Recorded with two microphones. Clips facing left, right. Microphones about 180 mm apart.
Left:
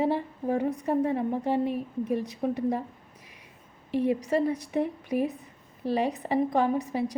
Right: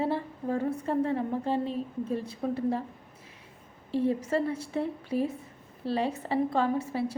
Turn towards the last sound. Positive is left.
turn(degrees=15)  # may be behind; listen again after turning